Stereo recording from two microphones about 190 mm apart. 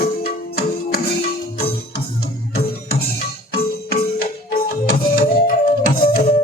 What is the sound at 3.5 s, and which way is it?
Music, 50° left (ahead or behind).